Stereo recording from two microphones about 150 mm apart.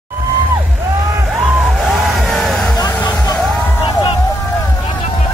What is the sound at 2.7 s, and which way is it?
Music, 25° left (ahead or behind).